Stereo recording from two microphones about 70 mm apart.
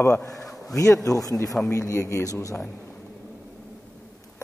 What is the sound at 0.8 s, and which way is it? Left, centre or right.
Speech, left.